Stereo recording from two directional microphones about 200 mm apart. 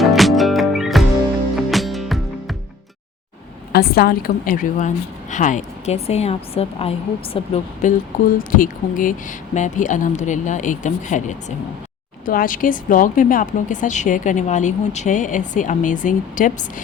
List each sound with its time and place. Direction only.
0.0 s music: centre (ahead or behind)
3.7 s a woman's voice: 50° left (ahead or behind)